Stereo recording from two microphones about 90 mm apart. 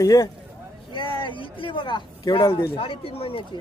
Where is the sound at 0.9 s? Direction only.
70° left (ahead or behind); by 3.4 s 90° left.